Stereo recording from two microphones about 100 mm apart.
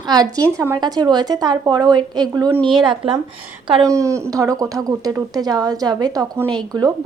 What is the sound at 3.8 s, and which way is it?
Speech, 35° right (ahead or behind).